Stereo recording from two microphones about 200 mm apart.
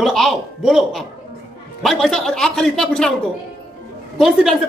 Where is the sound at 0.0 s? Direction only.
Centre (ahead or behind).